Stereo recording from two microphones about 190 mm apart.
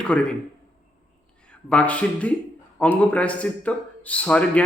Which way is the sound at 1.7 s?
5° left (ahead or behind).